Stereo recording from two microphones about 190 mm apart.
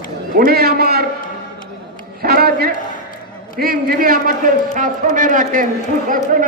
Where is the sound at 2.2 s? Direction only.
50° right (ahead or behind).